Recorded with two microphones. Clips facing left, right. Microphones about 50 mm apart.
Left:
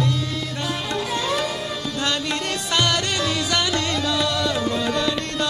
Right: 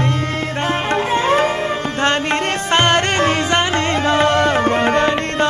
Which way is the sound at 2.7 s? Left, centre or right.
Right.